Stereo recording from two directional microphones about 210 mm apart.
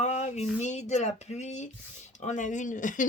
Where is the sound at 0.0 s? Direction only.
35° left (ahead or behind).